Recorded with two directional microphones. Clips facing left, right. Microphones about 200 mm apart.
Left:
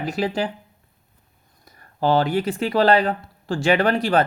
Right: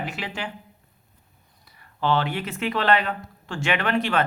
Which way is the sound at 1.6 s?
45° left (ahead or behind).